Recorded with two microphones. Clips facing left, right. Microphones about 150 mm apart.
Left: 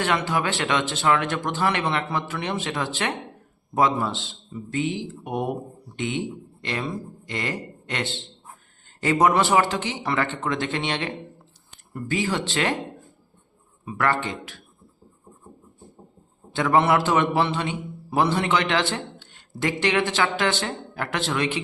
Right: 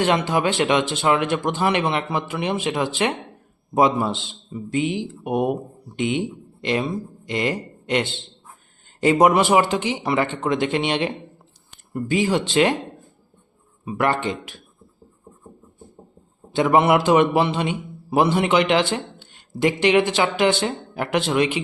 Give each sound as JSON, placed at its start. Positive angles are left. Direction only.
{"t": 0.0, "sound": "a man's voice", "side_deg": -20}
{"t": 13.8, "sound": "a man's voice", "side_deg": -20}
{"t": 16.6, "sound": "a man's voice", "side_deg": -15}